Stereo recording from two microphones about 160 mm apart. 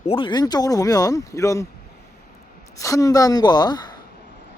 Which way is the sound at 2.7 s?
20° left (ahead or behind).